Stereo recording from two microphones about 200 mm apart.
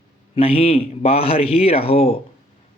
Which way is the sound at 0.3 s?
30° left (ahead or behind).